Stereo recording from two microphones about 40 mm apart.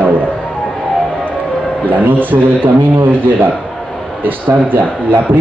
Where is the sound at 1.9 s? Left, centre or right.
Right.